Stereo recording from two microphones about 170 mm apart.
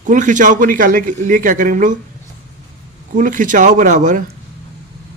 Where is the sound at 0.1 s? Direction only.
50° right (ahead or behind).